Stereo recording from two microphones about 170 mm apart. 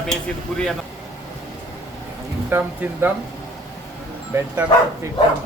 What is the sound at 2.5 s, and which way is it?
Speech, 10° right (ahead or behind).